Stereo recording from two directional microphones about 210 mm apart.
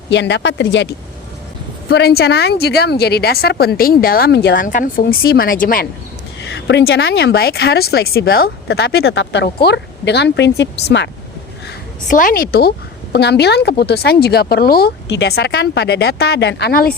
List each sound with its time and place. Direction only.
0.1 s speech: 55° left (ahead or behind)
1.9 s a woman's voice: 50° left (ahead or behind)
6.4 s a woman's voice: 55° left (ahead or behind)
12.0 s a woman's voice: 40° left (ahead or behind)